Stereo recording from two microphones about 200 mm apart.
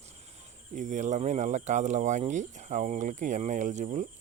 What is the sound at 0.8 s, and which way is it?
Speech, 40° right (ahead or behind).